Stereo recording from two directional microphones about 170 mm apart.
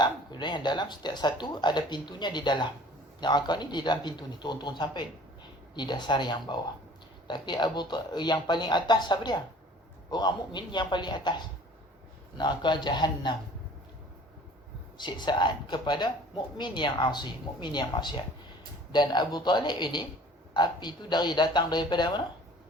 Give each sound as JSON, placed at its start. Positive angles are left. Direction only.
{"t": 0.0, "sound": "speech", "side_deg": 25}
{"t": 14.9, "sound": "speech", "side_deg": 25}